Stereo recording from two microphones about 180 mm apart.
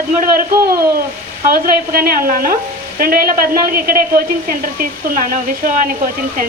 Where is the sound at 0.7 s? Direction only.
15° right (ahead or behind).